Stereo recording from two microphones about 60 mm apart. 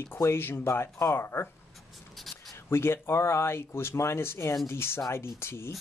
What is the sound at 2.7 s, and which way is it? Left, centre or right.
Speech, left.